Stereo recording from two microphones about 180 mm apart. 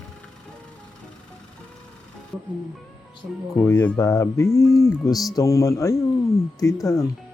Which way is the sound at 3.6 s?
15° left (ahead or behind).